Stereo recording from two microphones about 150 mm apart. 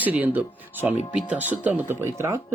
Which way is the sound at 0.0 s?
10° right (ahead or behind).